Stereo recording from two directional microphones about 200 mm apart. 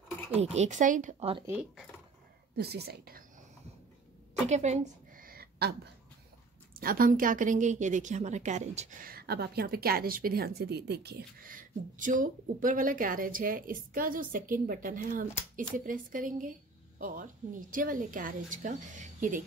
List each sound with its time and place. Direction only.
0.3 s a woman's voice: 30° right (ahead or behind)
2.5 s a woman's voice: 55° right (ahead or behind)
4.5 s a sound: 35° right (ahead or behind); by 5.8 s 50° right (ahead or behind)
6.8 s a woman's voice: 45° right (ahead or behind)